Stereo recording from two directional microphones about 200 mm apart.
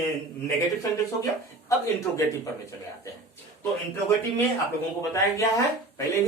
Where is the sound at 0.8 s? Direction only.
15° left (ahead or behind).